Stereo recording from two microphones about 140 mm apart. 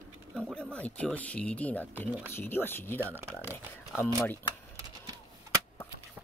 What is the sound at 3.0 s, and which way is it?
Speech, 15° right (ahead or behind).